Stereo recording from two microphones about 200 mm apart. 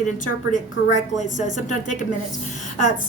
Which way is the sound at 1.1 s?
40° left (ahead or behind).